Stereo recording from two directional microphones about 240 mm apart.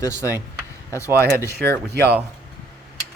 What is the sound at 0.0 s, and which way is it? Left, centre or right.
Speech, centre.